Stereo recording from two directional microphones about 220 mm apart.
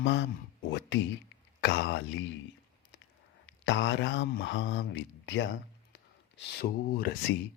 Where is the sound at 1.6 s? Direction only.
50° left (ahead or behind).